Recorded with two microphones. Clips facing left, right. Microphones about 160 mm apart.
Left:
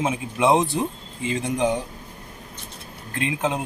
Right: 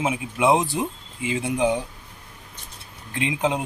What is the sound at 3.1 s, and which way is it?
Speech, 15° right (ahead or behind).